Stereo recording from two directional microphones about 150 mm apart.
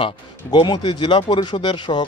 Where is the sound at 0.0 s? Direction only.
30° left (ahead or behind).